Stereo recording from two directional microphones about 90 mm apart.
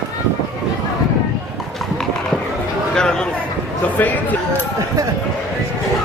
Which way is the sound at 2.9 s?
10° left (ahead or behind).